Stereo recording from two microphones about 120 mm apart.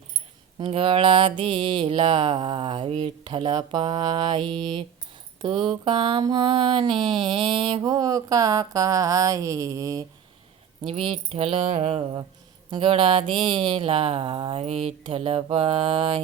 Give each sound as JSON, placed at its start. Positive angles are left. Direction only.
{"t": 0.6, "sound": "mantra", "side_deg": -50}
{"t": 7.8, "sound": "a sound", "side_deg": -30}
{"t": 10.8, "sound": "mantra", "side_deg": -50}
{"t": 14.6, "sound": "mantra", "side_deg": -60}